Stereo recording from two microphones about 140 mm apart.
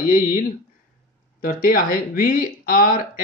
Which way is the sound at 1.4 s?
90° left.